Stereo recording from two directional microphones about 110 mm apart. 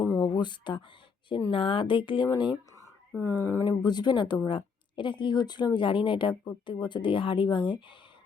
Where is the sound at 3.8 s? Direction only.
40° left (ahead or behind).